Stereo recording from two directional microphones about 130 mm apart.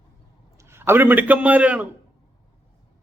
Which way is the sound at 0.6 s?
20° right (ahead or behind).